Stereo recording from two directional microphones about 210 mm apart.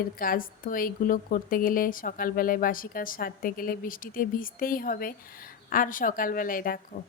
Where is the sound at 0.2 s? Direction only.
40° left (ahead or behind).